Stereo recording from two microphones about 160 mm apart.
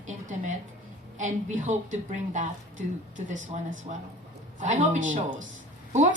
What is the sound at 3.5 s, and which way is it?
A woman's voice, 45° right (ahead or behind).